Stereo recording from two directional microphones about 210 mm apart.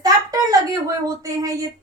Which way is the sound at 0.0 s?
15° right (ahead or behind).